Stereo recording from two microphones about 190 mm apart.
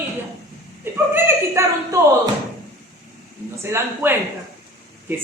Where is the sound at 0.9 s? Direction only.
15° right (ahead or behind).